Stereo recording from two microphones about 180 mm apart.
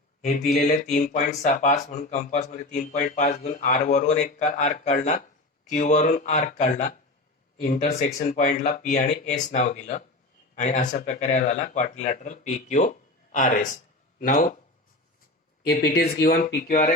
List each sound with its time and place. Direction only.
0.2 s speech: 40° left (ahead or behind)
15.7 s speech: 60° left (ahead or behind)